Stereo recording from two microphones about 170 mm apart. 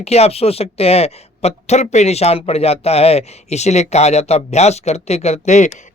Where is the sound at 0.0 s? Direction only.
40° left (ahead or behind).